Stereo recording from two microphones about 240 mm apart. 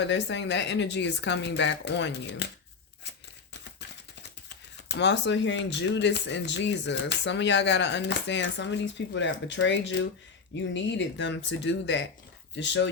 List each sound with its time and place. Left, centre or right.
0.0 s speech: left
4.9 s speech: left